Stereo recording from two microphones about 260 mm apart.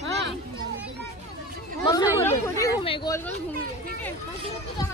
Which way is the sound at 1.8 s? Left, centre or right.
Centre.